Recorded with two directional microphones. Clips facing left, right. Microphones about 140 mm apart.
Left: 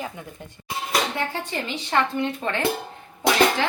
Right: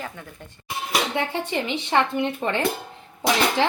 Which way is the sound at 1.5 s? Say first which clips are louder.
Right 3 dB; 20° right (ahead or behind).